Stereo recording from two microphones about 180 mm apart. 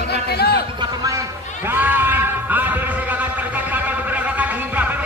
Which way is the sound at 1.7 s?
10° right (ahead or behind).